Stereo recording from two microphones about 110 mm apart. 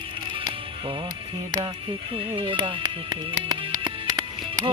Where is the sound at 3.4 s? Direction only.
40° right (ahead or behind).